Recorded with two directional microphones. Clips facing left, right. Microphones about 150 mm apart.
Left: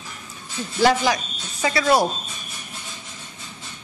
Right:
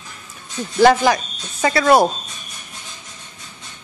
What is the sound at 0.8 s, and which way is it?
Speech, 55° right (ahead or behind).